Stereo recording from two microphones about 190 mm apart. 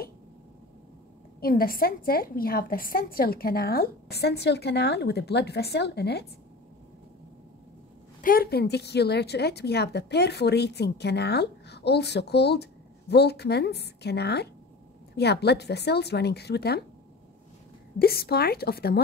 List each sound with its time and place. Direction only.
1.4 s a woman's voice: 50° left (ahead or behind)
8.2 s a woman's voice: 50° left (ahead or behind)
17.9 s a woman's voice: 55° left (ahead or behind)